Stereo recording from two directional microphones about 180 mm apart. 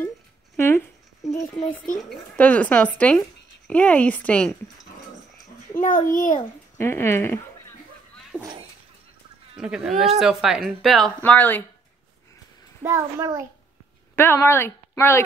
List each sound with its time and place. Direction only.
0.6 s a sound: 15° left (ahead or behind)
2.0 s speech: 5° left (ahead or behind)
5.8 s a child's voice: 50° left (ahead or behind)
6.8 s speech: 15° left (ahead or behind)
8.3 s a sound: 10° right (ahead or behind)
9.6 s speech: 5° right (ahead or behind)
12.8 s a child's voice: 15° right (ahead or behind)
14.1 s a woman's voice: 15° left (ahead or behind)